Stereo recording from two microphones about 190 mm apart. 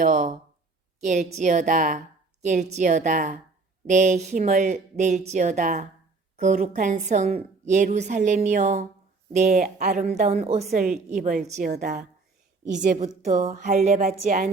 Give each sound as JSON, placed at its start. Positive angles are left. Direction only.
{"t": 0.0, "sound": "a woman's voice", "side_deg": -40}
{"t": 10.0, "sound": "a woman's voice", "side_deg": -35}
{"t": 10.7, "sound": "a woman's voice", "side_deg": -45}